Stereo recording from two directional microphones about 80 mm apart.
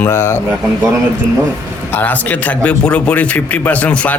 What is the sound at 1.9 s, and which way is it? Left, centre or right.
A man's voice, left.